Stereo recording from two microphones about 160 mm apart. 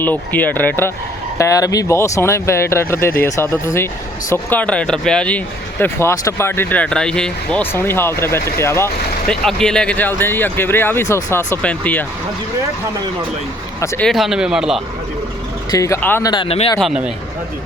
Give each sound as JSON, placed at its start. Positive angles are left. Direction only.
{"t": 0.0, "sound": "speech", "side_deg": 10}
{"t": 5.8, "sound": "speech", "side_deg": 15}
{"t": 9.2, "sound": "speech", "side_deg": 5}
{"t": 14.0, "sound": "speech", "side_deg": 0}
{"t": 15.7, "sound": "speech", "side_deg": 20}
{"t": 16.2, "sound": "speech", "side_deg": 30}
{"t": 16.8, "sound": "speech", "side_deg": -5}